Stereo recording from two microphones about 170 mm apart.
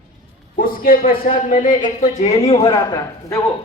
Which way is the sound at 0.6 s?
55° left (ahead or behind).